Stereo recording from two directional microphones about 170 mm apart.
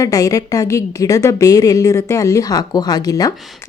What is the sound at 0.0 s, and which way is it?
A woman's voice, 20° left (ahead or behind).